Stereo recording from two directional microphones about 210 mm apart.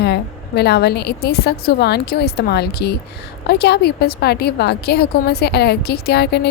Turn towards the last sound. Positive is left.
turn(degrees=50)  # may be behind; listen again after turning